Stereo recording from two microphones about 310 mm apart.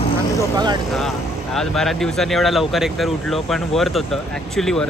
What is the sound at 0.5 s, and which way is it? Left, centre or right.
Speech, centre.